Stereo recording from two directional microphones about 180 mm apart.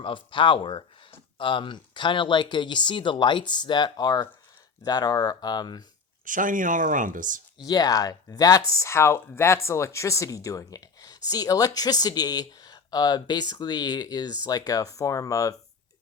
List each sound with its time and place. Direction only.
0.0 s speech: 25° left (ahead or behind)
6.2 s speech: 45° right (ahead or behind)
7.6 s speech: 20° left (ahead or behind)